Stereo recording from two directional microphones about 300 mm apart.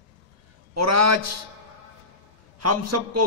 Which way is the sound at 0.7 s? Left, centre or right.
Right.